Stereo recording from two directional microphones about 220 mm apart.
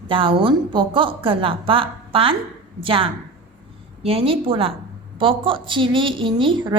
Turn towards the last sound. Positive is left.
turn(degrees=-20)  # may be behind; listen again after turning